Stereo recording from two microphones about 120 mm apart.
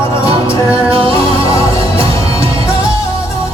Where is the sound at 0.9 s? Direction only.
50° right (ahead or behind).